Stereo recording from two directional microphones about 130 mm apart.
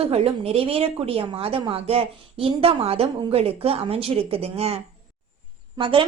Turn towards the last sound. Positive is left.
turn(degrees=-40)  # may be behind; listen again after turning